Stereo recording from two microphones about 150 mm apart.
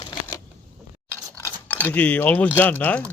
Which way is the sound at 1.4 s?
15° left (ahead or behind).